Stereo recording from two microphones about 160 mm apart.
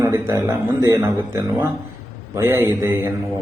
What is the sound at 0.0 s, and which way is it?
A man's voice, 20° right (ahead or behind).